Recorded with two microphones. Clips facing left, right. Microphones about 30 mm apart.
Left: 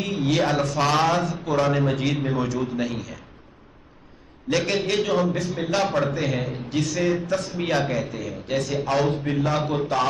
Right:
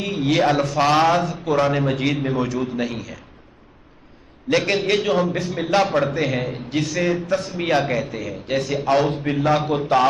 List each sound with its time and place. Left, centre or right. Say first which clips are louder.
0.0 s a man's voice: right 3 dB; centre
4.5 s a man's voice: right 4 dB; centre
9.9 s mantra: right 7 dB; right